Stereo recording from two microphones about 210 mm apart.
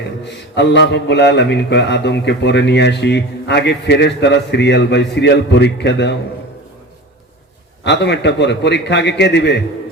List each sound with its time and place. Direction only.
0.3 s speech: 55° left (ahead or behind)
7.9 s speech: 55° left (ahead or behind)